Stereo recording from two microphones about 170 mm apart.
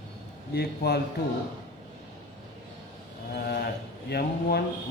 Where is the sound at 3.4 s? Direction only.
70° left (ahead or behind).